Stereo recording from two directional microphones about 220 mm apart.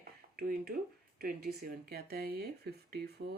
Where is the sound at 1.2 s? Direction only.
40° right (ahead or behind).